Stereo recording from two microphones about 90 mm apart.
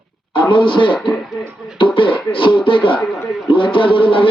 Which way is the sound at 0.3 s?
65° left (ahead or behind).